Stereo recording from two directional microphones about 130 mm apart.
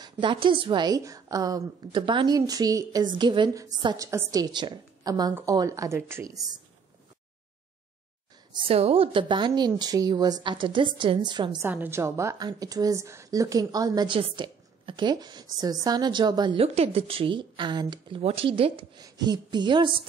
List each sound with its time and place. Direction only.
0.0 s a woman's voice: 40° right (ahead or behind)
8.5 s a woman's voice: 50° right (ahead or behind)
11.6 s a woman's voice: 15° right (ahead or behind); by 16.6 s 35° right (ahead or behind)
16.6 s a woman's voice: 55° right (ahead or behind); by 18.2 s 35° right (ahead or behind)
18.2 s a woman's voice: 45° right (ahead or behind)
19.0 s a woman's voice: 30° right (ahead or behind)